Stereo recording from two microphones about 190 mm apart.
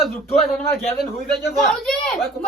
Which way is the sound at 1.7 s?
Centre (ahead or behind).